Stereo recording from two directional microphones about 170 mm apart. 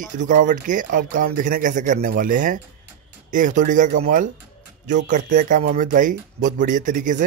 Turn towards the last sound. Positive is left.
turn(degrees=-50)  # may be behind; listen again after turning